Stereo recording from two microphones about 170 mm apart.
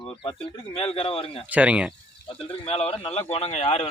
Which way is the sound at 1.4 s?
10° right (ahead or behind).